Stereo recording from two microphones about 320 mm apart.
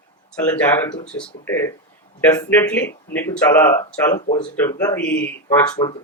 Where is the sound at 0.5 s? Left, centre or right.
Centre.